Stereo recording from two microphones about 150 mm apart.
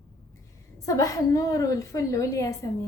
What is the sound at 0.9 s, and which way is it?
A woman's voice, 20° left (ahead or behind).